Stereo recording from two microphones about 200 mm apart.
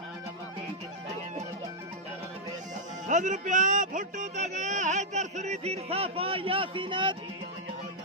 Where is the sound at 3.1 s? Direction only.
35° right (ahead or behind).